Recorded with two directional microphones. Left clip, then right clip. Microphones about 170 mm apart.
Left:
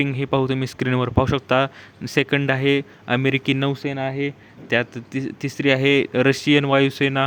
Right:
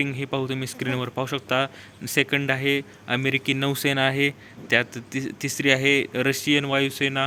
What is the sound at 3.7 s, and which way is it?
Speech, 5° left (ahead or behind).